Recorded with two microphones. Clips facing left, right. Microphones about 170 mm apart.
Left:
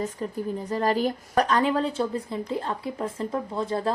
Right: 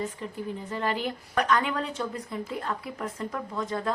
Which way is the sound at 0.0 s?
40° left (ahead or behind).